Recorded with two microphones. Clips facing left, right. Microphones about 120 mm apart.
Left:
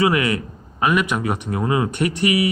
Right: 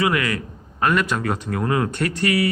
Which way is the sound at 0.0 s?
25° left (ahead or behind).